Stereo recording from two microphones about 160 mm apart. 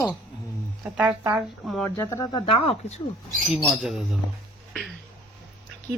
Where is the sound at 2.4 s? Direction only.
35° left (ahead or behind).